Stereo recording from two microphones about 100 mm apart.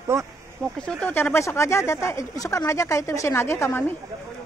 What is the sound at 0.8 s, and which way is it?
Speech, 10° left (ahead or behind).